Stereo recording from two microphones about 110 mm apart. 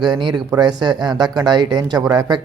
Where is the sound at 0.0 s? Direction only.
40° right (ahead or behind).